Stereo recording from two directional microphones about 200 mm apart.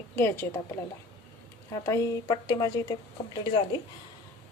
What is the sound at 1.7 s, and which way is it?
A woman's voice, 15° left (ahead or behind).